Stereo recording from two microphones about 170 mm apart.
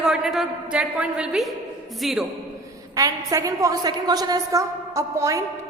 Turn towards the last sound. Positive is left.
turn(degrees=-20)  # may be behind; listen again after turning